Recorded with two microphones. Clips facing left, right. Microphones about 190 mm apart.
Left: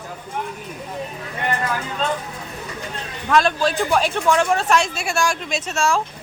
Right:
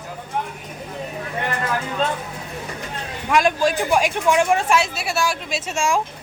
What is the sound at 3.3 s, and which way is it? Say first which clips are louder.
Speech: even; 15° right (ahead or behind).